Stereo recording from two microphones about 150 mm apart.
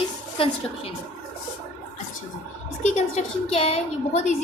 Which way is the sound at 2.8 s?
55° left (ahead or behind).